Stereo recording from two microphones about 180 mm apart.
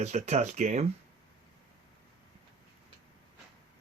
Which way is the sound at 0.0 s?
40° right (ahead or behind).